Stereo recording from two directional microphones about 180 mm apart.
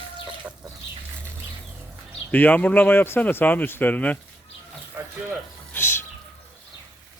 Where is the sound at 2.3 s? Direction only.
10° left (ahead or behind).